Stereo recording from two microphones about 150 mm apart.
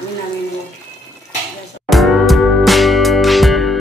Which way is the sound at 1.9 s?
Centre (ahead or behind).